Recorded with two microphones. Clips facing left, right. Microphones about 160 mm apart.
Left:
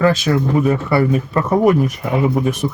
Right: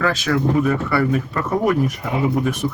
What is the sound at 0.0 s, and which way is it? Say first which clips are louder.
Speech: left 4 dB; 20° left (ahead or behind).